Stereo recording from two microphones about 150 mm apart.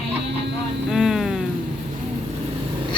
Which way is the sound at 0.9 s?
5° right (ahead or behind).